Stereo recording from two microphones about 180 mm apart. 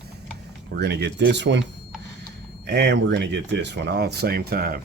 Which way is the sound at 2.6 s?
70° right (ahead or behind).